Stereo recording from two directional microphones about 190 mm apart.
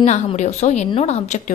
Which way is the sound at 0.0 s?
35° left (ahead or behind).